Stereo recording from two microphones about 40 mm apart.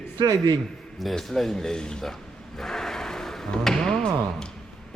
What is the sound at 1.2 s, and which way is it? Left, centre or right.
Speech, centre.